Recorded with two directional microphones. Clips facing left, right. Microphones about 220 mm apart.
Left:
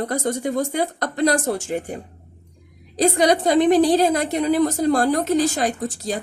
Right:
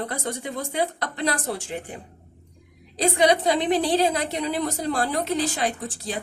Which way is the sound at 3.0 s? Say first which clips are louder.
Left 3 dB; 45° left (ahead or behind).